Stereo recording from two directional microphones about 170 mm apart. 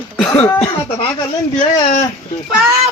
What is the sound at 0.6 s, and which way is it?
Speech, 35° left (ahead or behind).